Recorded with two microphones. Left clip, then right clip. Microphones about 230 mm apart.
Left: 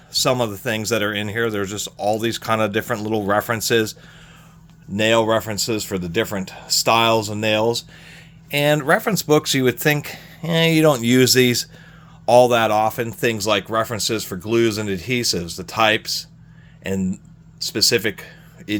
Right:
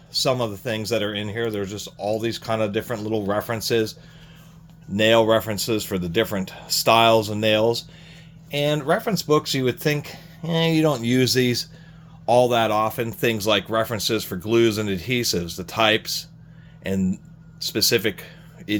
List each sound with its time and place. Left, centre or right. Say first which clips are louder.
0.1 s speech: left 3 dB; left
4.9 s speech: even; centre
8.4 s speech: left 5 dB; left; by 18.8 s centre